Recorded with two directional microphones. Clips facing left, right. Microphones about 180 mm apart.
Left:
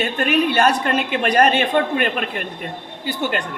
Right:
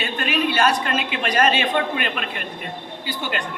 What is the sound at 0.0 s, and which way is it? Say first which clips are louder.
A woman's voice: left 5 dB; 50° left (ahead or behind).